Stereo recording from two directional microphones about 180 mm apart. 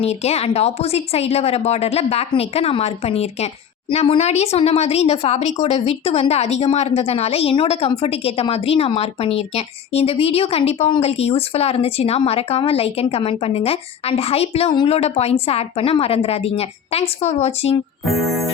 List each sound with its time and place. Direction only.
0.0 s speech: 35° left (ahead or behind)